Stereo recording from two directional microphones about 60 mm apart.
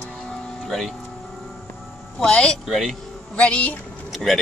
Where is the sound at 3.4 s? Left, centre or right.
Centre.